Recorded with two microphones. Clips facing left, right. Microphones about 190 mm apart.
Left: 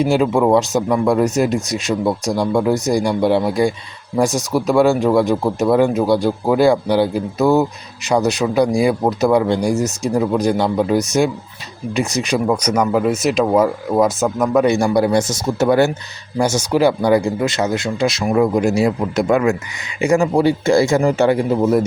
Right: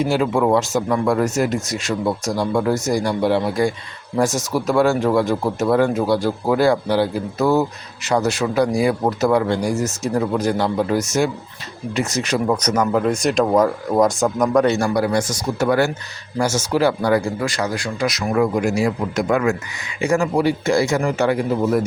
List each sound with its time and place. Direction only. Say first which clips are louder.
0.0 s speech: left 3 dB; 20° left (ahead or behind)